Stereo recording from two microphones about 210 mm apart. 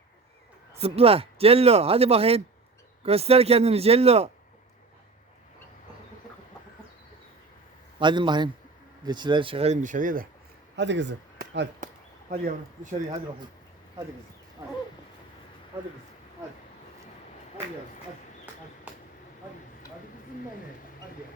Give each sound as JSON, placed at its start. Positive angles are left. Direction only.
{"t": 0.8, "sound": "speech", "side_deg": -30}
{"t": 7.9, "sound": "speech", "side_deg": -20}
{"t": 10.8, "sound": "speech", "side_deg": -60}
{"t": 11.3, "sound": "a sound", "side_deg": -55}
{"t": 12.3, "sound": "speech", "side_deg": -45}